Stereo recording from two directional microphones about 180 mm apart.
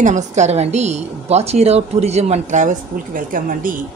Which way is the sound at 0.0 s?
40° right (ahead or behind).